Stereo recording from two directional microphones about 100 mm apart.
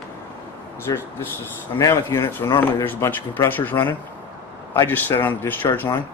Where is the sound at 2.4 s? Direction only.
40° left (ahead or behind).